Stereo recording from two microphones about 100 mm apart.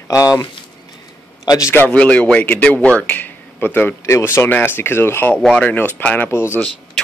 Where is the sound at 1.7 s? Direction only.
15° left (ahead or behind).